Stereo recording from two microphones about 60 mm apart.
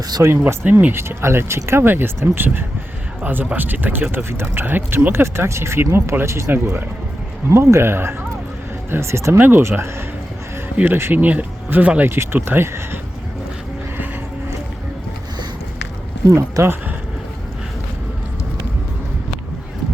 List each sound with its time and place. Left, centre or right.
0.4 s speech: right
0.9 s speech: right
5.2 s speech: right
6.5 s speech: right
7.5 s speech: right
9.4 s speech: right
12.0 s speech: right
16.3 s speech: right